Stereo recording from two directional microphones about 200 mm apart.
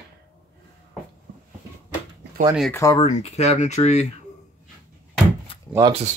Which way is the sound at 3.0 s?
30° left (ahead or behind).